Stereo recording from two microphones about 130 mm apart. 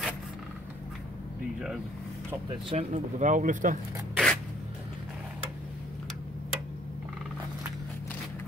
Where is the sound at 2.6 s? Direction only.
60° right (ahead or behind); by 3.8 s 80° right.